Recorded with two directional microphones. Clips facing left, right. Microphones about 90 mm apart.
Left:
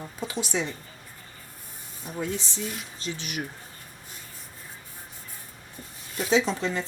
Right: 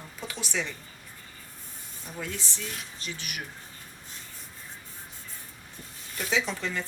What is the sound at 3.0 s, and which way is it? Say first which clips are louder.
Speech: left 7 dB; 25° left (ahead or behind).